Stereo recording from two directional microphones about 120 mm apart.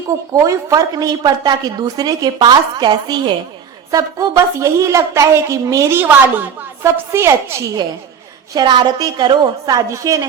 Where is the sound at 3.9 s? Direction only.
25° right (ahead or behind).